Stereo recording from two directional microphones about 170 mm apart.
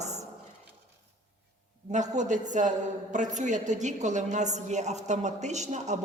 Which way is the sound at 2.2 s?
45° right (ahead or behind).